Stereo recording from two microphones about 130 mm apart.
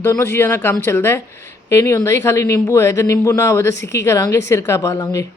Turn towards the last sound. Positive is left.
turn(degrees=25)  # may be behind; listen again after turning